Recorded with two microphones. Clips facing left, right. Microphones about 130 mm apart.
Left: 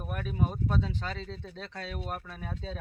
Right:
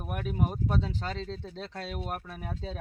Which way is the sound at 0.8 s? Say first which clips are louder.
Right 1 dB; 30° right (ahead or behind).